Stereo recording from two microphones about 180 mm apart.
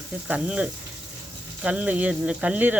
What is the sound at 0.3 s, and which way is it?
Speech, 5° right (ahead or behind).